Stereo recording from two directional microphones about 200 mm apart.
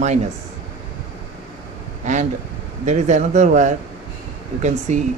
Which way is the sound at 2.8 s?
40° right (ahead or behind).